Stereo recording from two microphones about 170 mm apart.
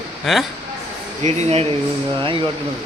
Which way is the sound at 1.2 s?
40° right (ahead or behind).